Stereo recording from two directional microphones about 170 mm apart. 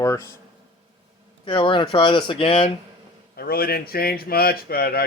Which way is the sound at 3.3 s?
65° left (ahead or behind).